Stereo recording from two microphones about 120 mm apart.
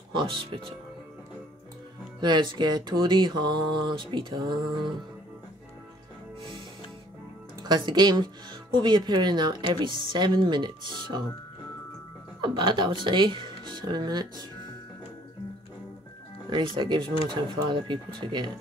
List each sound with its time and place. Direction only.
0.1 s speech: 45° right (ahead or behind)
2.1 s speech: 40° right (ahead or behind)
7.6 s speech: 40° right (ahead or behind)
12.4 s speech: 40° right (ahead or behind)
16.4 s speech: 40° right (ahead or behind)